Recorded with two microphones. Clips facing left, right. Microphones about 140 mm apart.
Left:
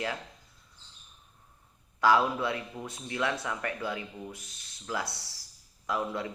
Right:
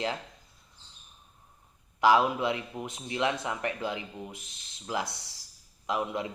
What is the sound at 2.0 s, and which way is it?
Speech, 20° right (ahead or behind).